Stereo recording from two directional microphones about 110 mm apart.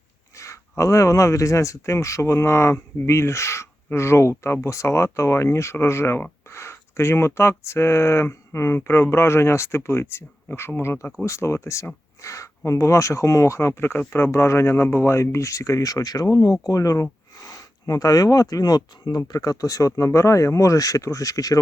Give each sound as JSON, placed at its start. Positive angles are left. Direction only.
{"t": 0.3, "sound": "speech", "side_deg": 30}